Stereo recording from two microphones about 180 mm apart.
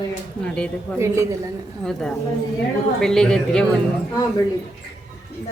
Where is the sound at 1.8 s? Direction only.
5° left (ahead or behind).